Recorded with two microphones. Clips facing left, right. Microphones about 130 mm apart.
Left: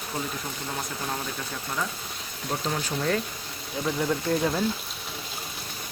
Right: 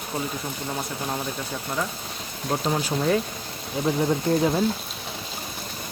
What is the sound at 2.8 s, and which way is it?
Speech, 15° right (ahead or behind).